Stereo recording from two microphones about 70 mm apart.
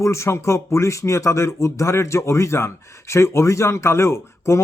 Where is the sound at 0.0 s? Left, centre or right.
Left.